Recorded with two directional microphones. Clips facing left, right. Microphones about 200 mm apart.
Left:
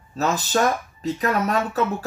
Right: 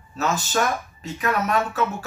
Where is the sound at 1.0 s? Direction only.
35° left (ahead or behind).